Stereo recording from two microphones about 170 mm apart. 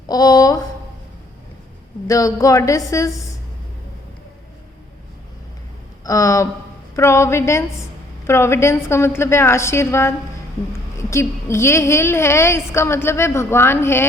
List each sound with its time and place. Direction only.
0.1 s a woman's voice: 20° left (ahead or behind)
2.0 s a woman's voice: 20° left (ahead or behind)
6.1 s a woman's voice: 20° left (ahead or behind)